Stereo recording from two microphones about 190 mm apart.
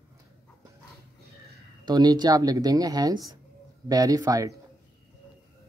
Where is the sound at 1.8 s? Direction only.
20° right (ahead or behind).